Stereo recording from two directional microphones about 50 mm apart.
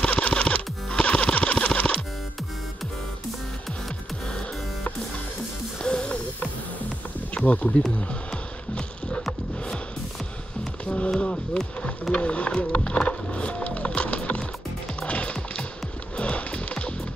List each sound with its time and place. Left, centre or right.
0.0 s music: left
5.8 s music: centre
7.3 s speech: left
8.1 s music: left
11.1 s music: centre
12.1 s speech: left
15.0 s music: left